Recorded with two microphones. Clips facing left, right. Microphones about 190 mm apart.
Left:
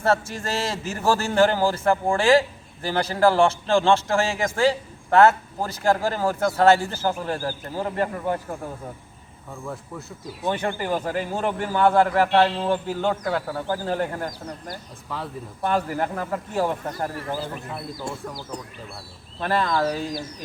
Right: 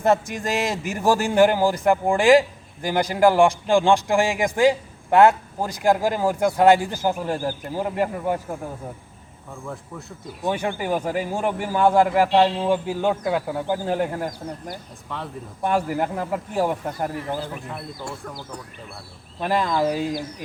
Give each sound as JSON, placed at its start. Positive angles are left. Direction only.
{"t": 0.0, "sound": "a man's voice", "side_deg": -15}
{"t": 9.6, "sound": "a man's voice", "side_deg": 0}
{"t": 15.1, "sound": "speech", "side_deg": 5}
{"t": 15.6, "sound": "a man's voice", "side_deg": -10}
{"t": 19.4, "sound": "a man's voice", "side_deg": -15}